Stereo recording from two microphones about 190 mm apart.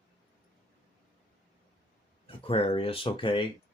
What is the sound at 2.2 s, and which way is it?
Speech, 30° left (ahead or behind).